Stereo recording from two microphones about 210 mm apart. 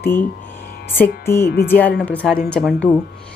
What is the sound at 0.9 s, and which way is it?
Speech, 10° left (ahead or behind).